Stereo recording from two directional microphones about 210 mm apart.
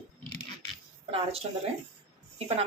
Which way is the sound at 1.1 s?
30° right (ahead or behind).